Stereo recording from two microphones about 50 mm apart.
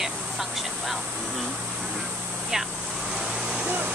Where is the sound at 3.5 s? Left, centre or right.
Right.